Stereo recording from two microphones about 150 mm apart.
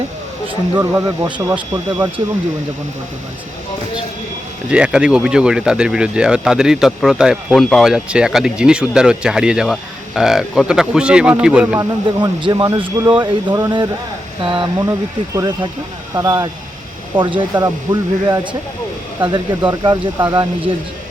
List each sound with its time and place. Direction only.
0.8 s speech: 15° right (ahead or behind)
4.7 s speech: 5° right (ahead or behind)
11.8 s speech: 30° right (ahead or behind)